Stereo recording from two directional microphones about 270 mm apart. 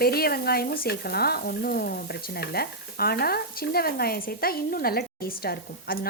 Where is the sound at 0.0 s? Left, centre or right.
Left.